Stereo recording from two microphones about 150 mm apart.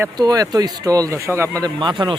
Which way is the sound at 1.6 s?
30° right (ahead or behind).